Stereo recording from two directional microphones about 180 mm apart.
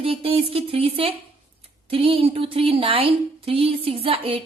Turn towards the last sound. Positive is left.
turn(degrees=-30)  # may be behind; listen again after turning